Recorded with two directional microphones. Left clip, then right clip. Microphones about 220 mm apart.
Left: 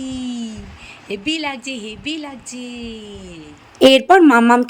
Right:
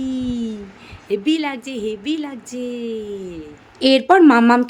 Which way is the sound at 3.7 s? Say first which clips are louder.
Left 3 dB; 30° left (ahead or behind).